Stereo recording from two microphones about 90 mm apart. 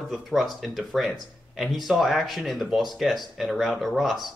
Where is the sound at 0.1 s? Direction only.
Centre (ahead or behind).